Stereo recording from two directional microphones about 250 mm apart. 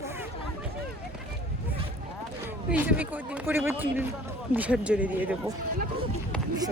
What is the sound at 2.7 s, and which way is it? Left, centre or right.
Speech, centre.